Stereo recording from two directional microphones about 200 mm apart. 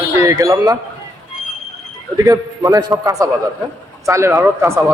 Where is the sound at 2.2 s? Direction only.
15° right (ahead or behind).